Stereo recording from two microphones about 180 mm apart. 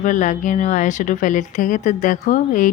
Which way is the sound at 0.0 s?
45° left (ahead or behind).